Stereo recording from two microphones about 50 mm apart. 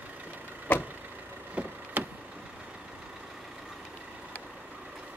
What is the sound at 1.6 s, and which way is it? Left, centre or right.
Vehicle, right.